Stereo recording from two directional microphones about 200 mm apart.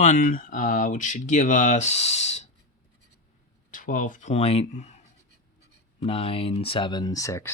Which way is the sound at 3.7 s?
40° left (ahead or behind).